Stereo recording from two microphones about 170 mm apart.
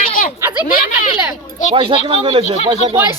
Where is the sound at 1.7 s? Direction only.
30° right (ahead or behind).